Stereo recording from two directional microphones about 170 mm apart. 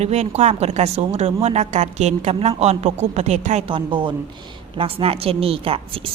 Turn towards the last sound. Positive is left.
turn(degrees=-35)  # may be behind; listen again after turning